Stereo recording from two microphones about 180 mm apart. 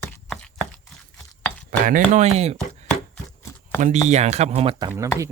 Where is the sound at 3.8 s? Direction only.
45° right (ahead or behind).